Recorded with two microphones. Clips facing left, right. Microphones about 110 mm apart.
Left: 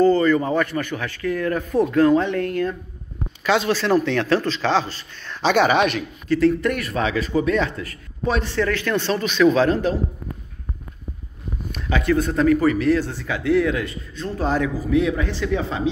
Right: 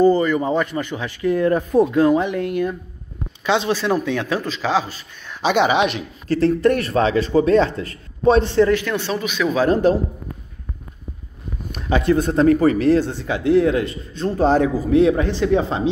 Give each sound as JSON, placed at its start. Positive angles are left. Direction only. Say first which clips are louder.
{"t": 0.0, "sound": "speech", "louder": "right 1 dB", "side_deg": -15}
{"t": 6.2, "sound": "a man's voice", "louder": "right 2 dB", "side_deg": -35}
{"t": 11.9, "sound": "a man's voice", "louder": "right 3 dB", "side_deg": -25}